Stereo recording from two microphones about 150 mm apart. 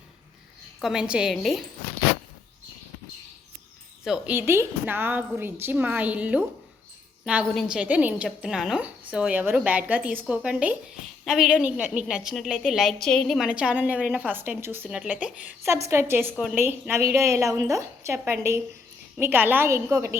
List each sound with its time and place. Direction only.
0.8 s a woman's voice: 5° right (ahead or behind)
4.0 s a woman's voice: 5° right (ahead or behind)
4.4 s a woman's voice: 15° right (ahead or behind)
7.5 s a woman's voice: 5° right (ahead or behind)